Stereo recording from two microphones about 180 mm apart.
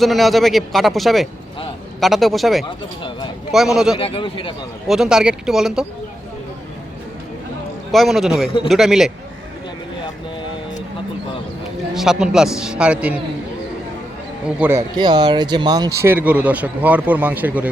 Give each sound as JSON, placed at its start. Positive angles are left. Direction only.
{"t": 0.0, "sound": "speech", "side_deg": 0}
{"t": 2.6, "sound": "speech", "side_deg": 25}
{"t": 3.5, "sound": "speech", "side_deg": 0}
{"t": 3.9, "sound": "speech", "side_deg": 30}
{"t": 4.9, "sound": "speech", "side_deg": -5}
{"t": 7.9, "sound": "speech", "side_deg": 0}
{"t": 11.9, "sound": "speech", "side_deg": -5}
{"t": 14.4, "sound": "speech", "side_deg": -10}